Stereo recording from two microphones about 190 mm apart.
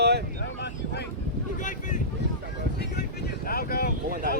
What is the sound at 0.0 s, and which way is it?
Boat, 60° right (ahead or behind).